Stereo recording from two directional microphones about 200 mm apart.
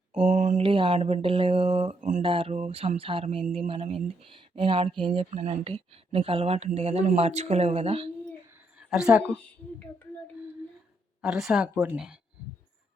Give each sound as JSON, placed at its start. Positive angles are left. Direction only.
{"t": 0.3, "sound": "mantra", "side_deg": -40}
{"t": 2.2, "sound": "mantra", "side_deg": -25}
{"t": 5.0, "sound": "speech", "side_deg": -35}
{"t": 8.8, "sound": "a woman's voice", "side_deg": -5}
{"t": 11.2, "sound": "a woman's voice", "side_deg": 0}